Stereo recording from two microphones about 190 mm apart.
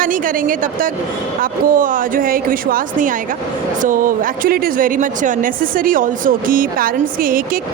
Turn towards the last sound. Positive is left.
turn(degrees=-50)  # may be behind; listen again after turning